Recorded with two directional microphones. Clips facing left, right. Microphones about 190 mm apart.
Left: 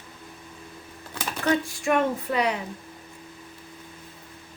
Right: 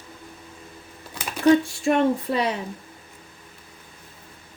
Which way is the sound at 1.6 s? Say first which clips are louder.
Right 3 dB; 30° right (ahead or behind).